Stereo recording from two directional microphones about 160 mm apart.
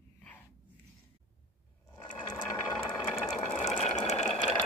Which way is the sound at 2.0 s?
25° left (ahead or behind).